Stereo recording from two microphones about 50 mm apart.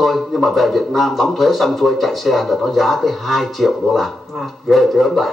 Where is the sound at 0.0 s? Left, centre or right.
Centre.